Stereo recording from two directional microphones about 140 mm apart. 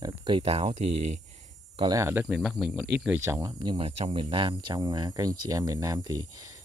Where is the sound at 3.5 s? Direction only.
35° right (ahead or behind).